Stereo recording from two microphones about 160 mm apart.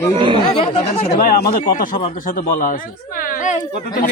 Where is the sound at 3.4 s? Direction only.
60° left (ahead or behind).